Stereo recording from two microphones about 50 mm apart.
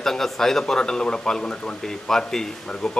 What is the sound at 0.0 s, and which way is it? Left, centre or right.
Speech, centre.